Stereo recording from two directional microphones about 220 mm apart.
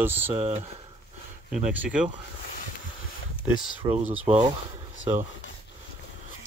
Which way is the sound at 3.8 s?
30° right (ahead or behind).